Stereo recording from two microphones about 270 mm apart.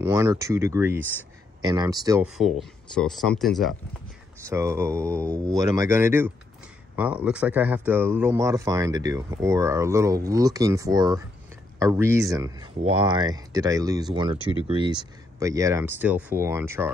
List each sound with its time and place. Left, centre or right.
0.0 s speech: centre
2.2 s speech: centre
4.5 s speech: centre